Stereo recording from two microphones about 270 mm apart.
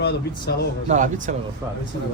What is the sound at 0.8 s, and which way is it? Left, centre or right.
Speech, right.